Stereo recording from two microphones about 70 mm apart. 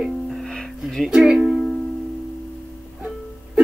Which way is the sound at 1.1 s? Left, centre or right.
Centre.